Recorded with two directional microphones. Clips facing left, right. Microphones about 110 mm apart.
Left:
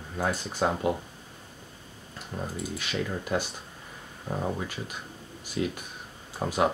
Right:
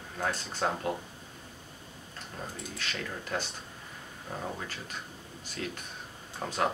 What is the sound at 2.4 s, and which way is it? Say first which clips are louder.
Speech: left 6 dB; 10° left (ahead or behind).